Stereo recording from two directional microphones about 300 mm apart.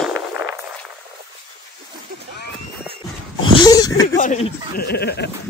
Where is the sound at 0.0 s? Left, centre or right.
Centre.